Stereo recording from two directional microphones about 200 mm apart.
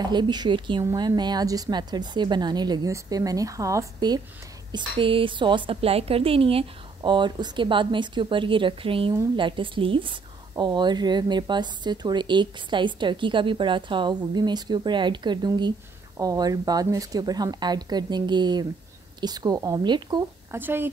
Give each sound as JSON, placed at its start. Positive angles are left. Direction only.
{"t": 0.0, "sound": "a woman's voice", "side_deg": -20}
{"t": 20.5, "sound": "speech", "side_deg": -10}